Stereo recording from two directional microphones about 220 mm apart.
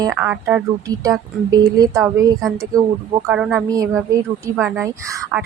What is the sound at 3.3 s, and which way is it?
Speech, 5° right (ahead or behind).